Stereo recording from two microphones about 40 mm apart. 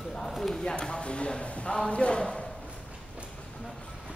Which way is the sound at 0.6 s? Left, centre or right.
Left.